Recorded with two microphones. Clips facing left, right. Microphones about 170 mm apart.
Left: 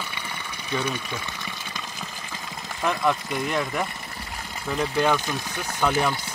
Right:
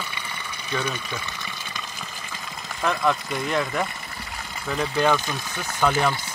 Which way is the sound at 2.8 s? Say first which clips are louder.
Right 1 dB; 10° left (ahead or behind).